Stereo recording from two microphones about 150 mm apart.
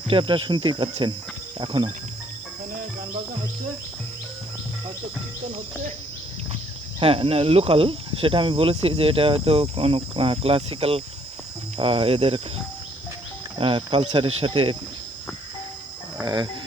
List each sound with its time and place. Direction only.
0.1 s speech: 35° right (ahead or behind)
7.0 s speech: 40° right (ahead or behind)
13.6 s speech: 35° right (ahead or behind)
16.2 s livestock: 30° right (ahead or behind)